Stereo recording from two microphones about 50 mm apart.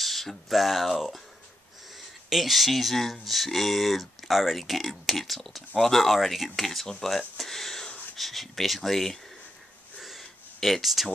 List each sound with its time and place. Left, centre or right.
0.0 s speech: centre
2.2 s speech: centre
9.9 s a sound: centre